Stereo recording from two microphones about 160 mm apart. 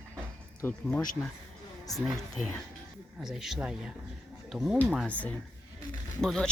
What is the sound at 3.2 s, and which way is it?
Speech, 5° right (ahead or behind).